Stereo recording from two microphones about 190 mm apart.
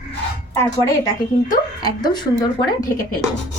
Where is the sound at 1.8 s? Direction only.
20° left (ahead or behind).